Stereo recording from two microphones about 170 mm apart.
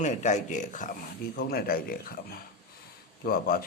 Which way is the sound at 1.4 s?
65° left (ahead or behind).